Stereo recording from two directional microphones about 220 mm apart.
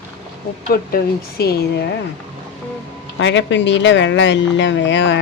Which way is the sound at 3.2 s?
55° left (ahead or behind).